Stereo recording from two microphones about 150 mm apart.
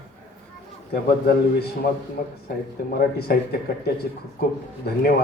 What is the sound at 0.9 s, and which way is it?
Speech, 90° left.